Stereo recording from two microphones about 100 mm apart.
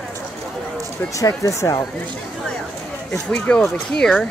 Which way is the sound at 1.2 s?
35° left (ahead or behind).